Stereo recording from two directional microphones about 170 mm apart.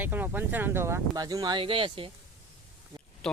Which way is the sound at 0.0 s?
10° right (ahead or behind).